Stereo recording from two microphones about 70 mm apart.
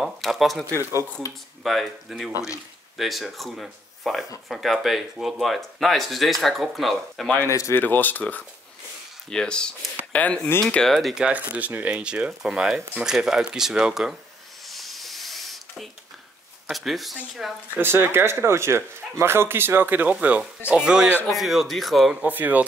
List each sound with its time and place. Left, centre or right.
0.0 s speech: centre
7.4 s speech: left
7.8 s speech: left
10.9 s speech: centre
11.1 s speech: centre
14.7 s a sound: centre
16.7 s speech: centre
17.7 s speech: right; by 22.1 s centre
22.1 s speech: right